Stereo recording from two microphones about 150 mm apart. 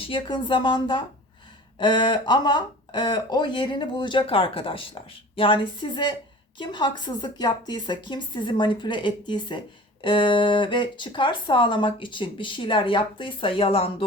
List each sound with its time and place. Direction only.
0.0 s speech: 35° left (ahead or behind)